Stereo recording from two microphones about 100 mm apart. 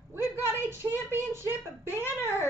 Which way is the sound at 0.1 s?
25° right (ahead or behind).